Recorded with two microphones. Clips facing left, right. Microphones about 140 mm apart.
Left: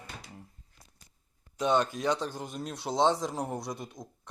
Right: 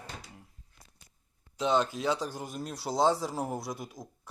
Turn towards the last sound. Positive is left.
turn(degrees=0)  # may be behind; listen again after turning